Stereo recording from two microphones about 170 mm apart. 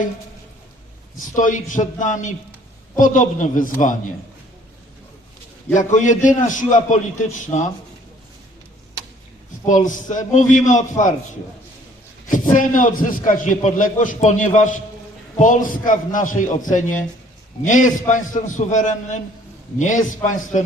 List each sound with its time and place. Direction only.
1.4 s a man's voice: 50° left (ahead or behind)
5.7 s a man's voice: 45° left (ahead or behind)
9.6 s a man's voice: 50° left (ahead or behind)
12.3 s a man's voice: 50° left (ahead or behind)